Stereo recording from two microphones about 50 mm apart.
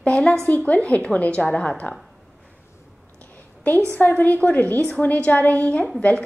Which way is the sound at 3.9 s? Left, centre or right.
Left.